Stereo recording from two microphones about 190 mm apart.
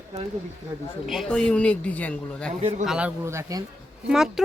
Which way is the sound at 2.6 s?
35° right (ahead or behind).